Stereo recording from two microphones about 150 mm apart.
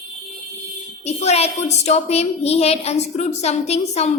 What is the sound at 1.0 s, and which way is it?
A woman's voice, 45° left (ahead or behind).